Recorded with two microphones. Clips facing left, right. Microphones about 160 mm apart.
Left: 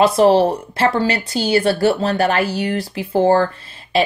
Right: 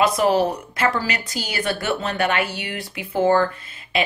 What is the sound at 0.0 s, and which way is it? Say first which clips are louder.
A woman's voice: left 6 dB; 30° left (ahead or behind).